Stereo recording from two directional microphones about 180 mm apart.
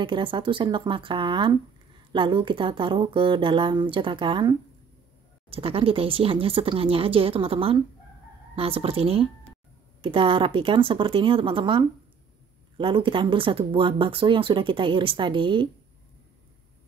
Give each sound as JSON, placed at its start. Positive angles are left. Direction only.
{"t": 0.0, "sound": "speech", "side_deg": -30}